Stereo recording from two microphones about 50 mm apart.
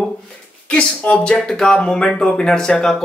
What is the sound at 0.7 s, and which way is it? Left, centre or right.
Speech, centre.